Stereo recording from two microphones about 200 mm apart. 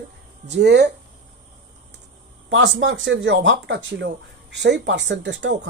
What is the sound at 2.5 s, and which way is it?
Speech, 70° right (ahead or behind).